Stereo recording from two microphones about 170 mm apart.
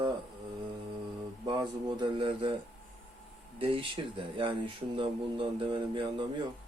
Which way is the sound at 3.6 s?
30° right (ahead or behind).